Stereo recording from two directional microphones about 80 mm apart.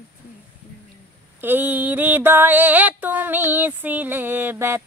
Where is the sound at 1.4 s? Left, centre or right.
Right.